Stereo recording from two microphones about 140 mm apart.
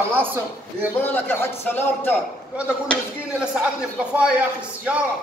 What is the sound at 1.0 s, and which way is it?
A man's voice, 15° left (ahead or behind).